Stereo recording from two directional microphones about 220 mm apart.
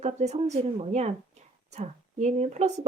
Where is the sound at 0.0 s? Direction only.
30° right (ahead or behind).